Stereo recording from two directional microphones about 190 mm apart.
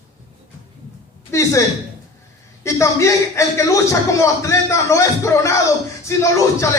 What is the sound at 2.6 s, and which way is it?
A man's voice, 15° left (ahead or behind).